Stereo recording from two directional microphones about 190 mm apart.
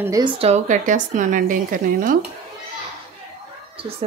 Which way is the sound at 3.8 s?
30° right (ahead or behind).